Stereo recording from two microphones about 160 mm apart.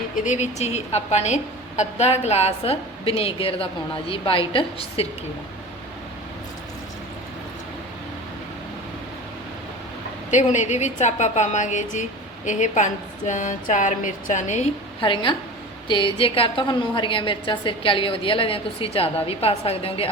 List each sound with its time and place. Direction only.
0.3 s a woman's voice: 45° left (ahead or behind)
10.3 s a woman's voice: 50° left (ahead or behind)
15.0 s a woman's voice: 30° left (ahead or behind)